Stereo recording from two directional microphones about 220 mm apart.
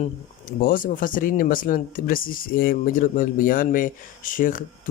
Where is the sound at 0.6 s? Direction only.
40° left (ahead or behind).